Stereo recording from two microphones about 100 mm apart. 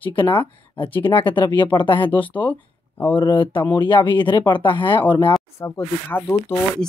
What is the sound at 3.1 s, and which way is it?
Speech, 55° left (ahead or behind).